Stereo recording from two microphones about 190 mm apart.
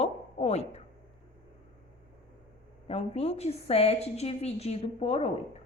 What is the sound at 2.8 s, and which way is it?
A woman's voice, 30° left (ahead or behind).